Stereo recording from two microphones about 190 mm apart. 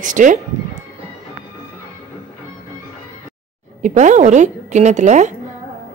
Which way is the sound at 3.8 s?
40° right (ahead or behind).